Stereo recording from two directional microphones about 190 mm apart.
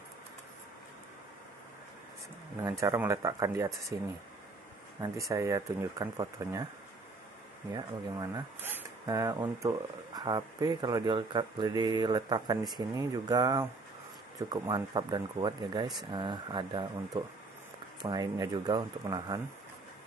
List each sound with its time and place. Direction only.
2.8 s speech: 15° right (ahead or behind)
5.0 s speech: 15° right (ahead or behind)
7.7 s speech: 15° right (ahead or behind)